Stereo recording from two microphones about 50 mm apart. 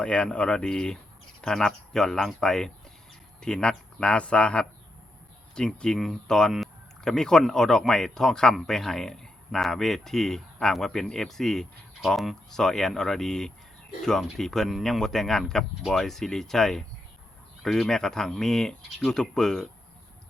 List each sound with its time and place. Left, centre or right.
0.0 s speech: left